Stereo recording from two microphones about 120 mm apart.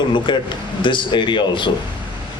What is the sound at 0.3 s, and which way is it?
Speech, 40° left (ahead or behind).